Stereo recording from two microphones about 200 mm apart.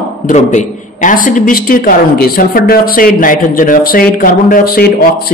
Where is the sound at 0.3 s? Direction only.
35° left (ahead or behind).